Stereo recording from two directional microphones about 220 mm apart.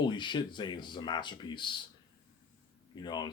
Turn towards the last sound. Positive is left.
turn(degrees=20)  # may be behind; listen again after turning